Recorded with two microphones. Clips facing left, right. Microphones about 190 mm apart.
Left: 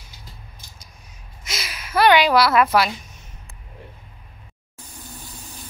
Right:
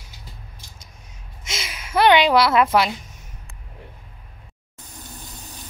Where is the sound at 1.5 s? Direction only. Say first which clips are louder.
Right 1 dB; 25° right (ahead or behind).